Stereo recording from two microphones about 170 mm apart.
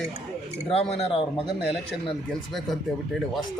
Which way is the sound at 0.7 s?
35° left (ahead or behind).